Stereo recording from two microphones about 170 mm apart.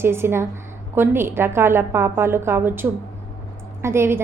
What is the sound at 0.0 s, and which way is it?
A woman's voice, 15° right (ahead or behind).